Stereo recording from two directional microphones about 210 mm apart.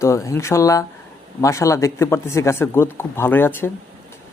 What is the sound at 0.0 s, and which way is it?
Speech, 15° left (ahead or behind).